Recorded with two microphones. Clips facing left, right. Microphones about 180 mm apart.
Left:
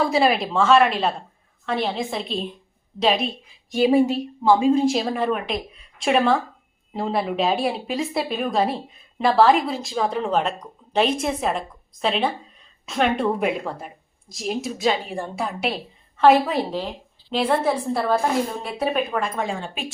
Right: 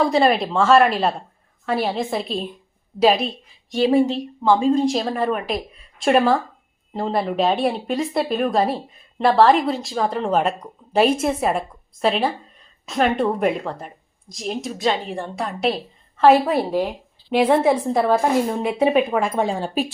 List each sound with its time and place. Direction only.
0.0 s a woman's voice: 5° left (ahead or behind); by 19.3 s 15° right (ahead or behind)
19.4 s speech: 35° right (ahead or behind)